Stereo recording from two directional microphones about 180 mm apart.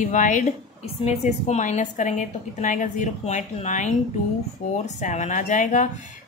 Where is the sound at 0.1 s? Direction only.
45° left (ahead or behind).